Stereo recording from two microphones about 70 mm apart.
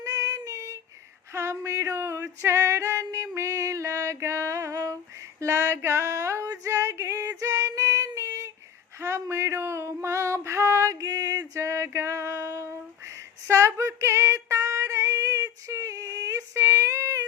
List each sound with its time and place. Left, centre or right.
0.0 s child singing: right
1.3 s female singing: right
9.0 s a sound: right
13.5 s female singing: right